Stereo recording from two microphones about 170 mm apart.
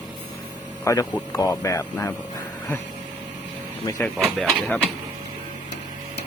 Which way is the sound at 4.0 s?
Centre (ahead or behind).